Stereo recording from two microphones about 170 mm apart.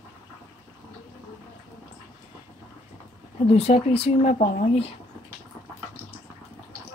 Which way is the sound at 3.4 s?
35° left (ahead or behind).